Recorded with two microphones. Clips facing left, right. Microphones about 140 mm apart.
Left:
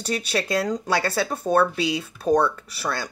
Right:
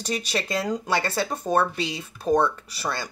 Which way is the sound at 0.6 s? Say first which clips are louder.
Left 1 dB; 10° right (ahead or behind).